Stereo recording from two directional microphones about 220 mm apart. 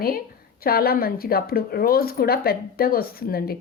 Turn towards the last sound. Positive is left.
turn(degrees=45)  # may be behind; listen again after turning